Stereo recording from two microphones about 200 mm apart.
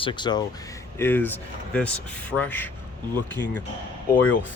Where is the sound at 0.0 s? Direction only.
25° left (ahead or behind).